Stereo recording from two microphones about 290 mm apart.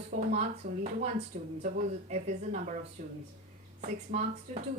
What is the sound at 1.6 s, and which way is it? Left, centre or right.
A woman's voice, right.